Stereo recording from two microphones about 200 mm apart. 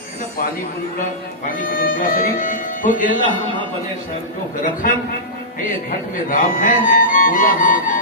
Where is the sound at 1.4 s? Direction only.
45° left (ahead or behind).